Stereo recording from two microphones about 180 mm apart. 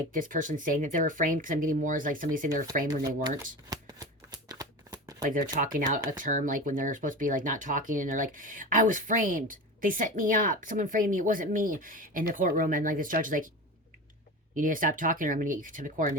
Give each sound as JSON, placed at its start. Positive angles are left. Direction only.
{"t": 0.1, "sound": "speech", "side_deg": -50}
{"t": 3.7, "sound": "shuffling cards", "side_deg": -20}
{"t": 5.2, "sound": "speech", "side_deg": -50}
{"t": 14.5, "sound": "speech", "side_deg": -50}